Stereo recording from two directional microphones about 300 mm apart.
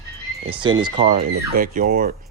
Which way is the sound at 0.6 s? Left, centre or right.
Centre.